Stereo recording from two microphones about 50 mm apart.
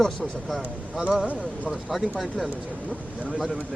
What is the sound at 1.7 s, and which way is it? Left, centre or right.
Speech, centre.